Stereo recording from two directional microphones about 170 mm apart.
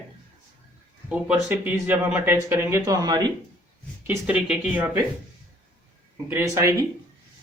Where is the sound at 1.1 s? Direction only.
5° right (ahead or behind); by 3.3 s 25° right (ahead or behind).